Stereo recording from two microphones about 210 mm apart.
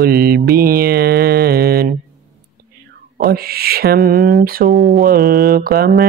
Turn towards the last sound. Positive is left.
turn(degrees=-45)  # may be behind; listen again after turning